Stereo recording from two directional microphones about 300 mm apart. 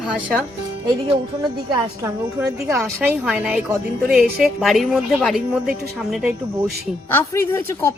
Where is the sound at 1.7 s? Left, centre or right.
Centre.